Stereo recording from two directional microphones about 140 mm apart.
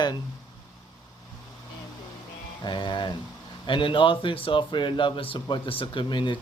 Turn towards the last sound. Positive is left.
turn(degrees=35)  # may be behind; listen again after turning